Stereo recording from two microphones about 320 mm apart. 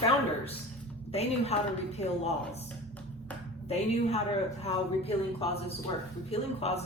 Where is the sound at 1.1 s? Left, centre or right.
Centre.